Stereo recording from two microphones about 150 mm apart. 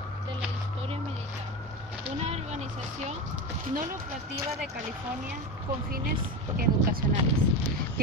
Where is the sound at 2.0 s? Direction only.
45° right (ahead or behind).